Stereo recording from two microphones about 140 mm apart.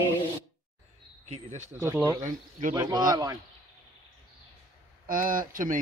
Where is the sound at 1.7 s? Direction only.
20° right (ahead or behind).